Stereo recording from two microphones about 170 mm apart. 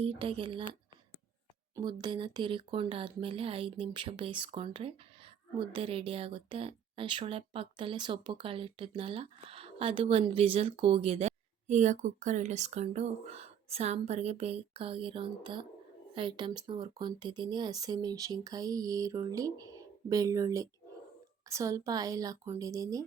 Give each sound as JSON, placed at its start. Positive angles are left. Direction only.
{"t": 0.0, "sound": "a woman's voice", "side_deg": -30}